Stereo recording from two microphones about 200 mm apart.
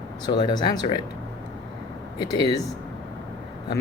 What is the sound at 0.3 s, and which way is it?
Speech, 20° left (ahead or behind).